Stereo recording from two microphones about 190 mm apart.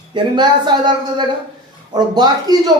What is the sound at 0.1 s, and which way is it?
Speech, 25° right (ahead or behind).